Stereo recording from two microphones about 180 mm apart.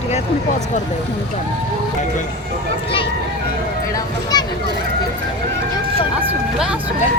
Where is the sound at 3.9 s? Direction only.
20° left (ahead or behind).